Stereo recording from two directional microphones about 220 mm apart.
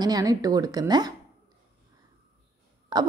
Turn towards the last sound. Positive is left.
turn(degrees=-20)  # may be behind; listen again after turning